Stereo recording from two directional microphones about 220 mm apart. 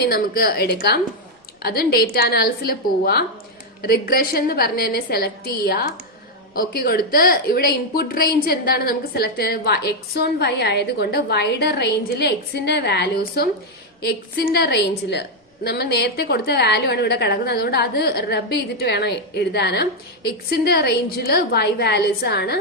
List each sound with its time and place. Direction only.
0.0 s speech: 45° left (ahead or behind)